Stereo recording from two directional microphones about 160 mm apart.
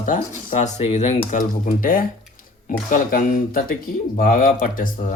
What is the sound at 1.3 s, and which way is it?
Speech, 55° left (ahead or behind).